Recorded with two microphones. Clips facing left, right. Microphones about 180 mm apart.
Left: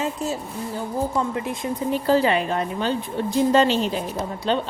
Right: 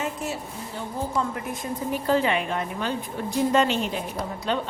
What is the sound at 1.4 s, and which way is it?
A woman's voice, 25° left (ahead or behind).